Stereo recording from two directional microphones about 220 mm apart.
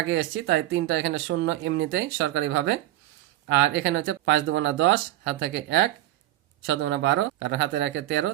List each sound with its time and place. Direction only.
0.1 s speech: 55° right (ahead or behind)